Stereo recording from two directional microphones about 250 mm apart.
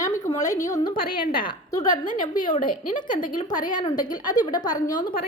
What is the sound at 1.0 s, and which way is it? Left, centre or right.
Speech, left.